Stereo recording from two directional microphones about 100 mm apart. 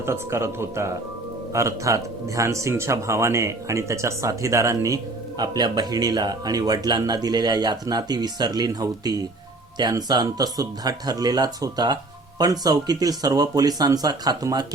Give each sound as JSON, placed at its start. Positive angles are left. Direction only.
{"t": 0.0, "sound": "speech", "side_deg": -25}
{"t": 5.4, "sound": "speech", "side_deg": -45}